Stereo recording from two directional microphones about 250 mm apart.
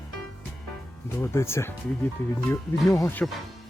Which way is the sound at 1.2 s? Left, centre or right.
Centre.